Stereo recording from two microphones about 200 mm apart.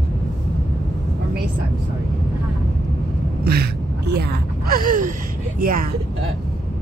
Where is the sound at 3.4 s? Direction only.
50° right (ahead or behind).